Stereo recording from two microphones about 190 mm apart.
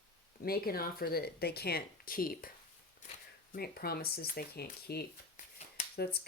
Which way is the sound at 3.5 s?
55° left (ahead or behind).